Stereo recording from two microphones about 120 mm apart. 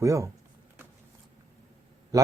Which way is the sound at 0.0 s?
25° right (ahead or behind).